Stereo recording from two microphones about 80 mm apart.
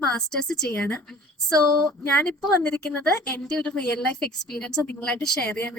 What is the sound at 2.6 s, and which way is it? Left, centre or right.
Speech, centre.